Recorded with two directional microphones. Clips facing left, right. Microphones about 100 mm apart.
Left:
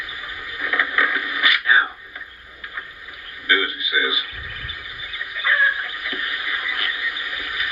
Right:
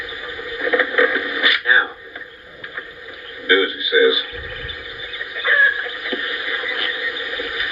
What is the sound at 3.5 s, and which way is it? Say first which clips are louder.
Radio: right 5 dB; 20° right (ahead or behind).